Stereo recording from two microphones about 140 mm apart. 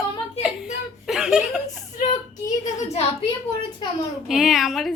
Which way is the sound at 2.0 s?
60° left (ahead or behind).